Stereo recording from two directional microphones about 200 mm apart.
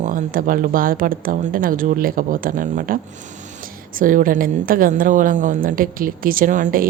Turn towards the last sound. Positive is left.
turn(degrees=-40)  # may be behind; listen again after turning